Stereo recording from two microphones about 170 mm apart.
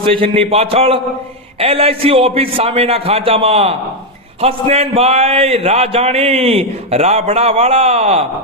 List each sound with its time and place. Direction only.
0.0 s a man's voice: 30° right (ahead or behind)